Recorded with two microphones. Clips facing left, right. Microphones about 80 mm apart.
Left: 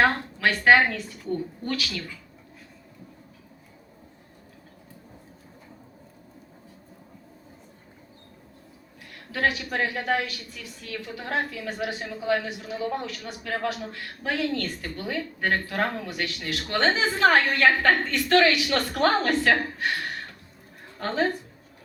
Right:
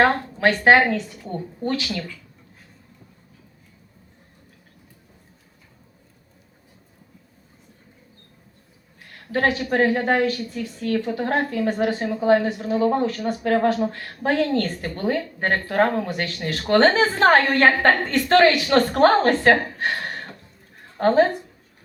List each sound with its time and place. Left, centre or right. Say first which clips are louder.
0.0 s a woman's voice: right 4 dB; right
9.3 s a woman's voice: right 5 dB; right
19.8 s a sound: right 3 dB; right
21.0 s a woman's voice: right 10 dB; right